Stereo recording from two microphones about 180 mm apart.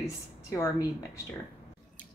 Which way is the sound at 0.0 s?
15° left (ahead or behind).